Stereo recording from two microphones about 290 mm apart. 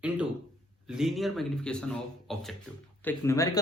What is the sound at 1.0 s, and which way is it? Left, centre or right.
A man's voice, centre.